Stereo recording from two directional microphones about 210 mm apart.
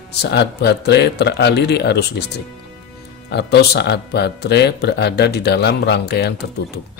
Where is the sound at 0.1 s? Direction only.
50° left (ahead or behind).